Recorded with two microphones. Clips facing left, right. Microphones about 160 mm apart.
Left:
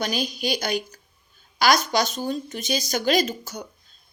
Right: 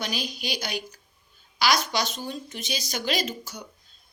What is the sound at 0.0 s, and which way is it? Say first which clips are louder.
Speech: left 6 dB; 45° left (ahead or behind).